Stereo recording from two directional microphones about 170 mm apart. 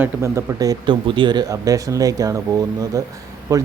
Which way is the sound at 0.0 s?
15° right (ahead or behind).